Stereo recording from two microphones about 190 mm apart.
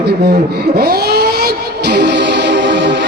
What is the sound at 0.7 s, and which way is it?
Music, 55° right (ahead or behind).